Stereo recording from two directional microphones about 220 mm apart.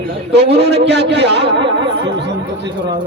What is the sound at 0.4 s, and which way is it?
A man's voice, 50° right (ahead or behind).